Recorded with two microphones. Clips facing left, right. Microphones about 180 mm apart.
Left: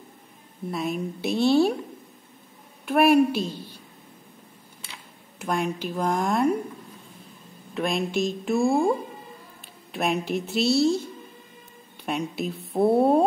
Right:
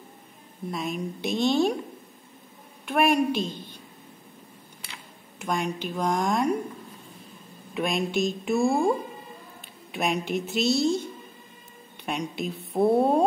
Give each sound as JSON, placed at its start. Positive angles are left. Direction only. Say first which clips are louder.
{"t": 0.7, "sound": "a woman's voice", "louder": "left 2 dB", "side_deg": 5}
{"t": 2.8, "sound": "a woman's voice", "louder": "left 4 dB", "side_deg": 5}
{"t": 5.4, "sound": "a woman's voice", "louder": "left 2 dB", "side_deg": 5}
{"t": 7.7, "sound": "a woman's voice", "louder": "left 1 dB", "side_deg": 0}
{"t": 9.9, "sound": "a woman's voice", "louder": "left 1 dB", "side_deg": 0}